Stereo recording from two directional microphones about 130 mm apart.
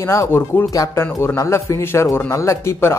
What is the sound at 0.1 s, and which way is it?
A man's voice, 20° left (ahead or behind).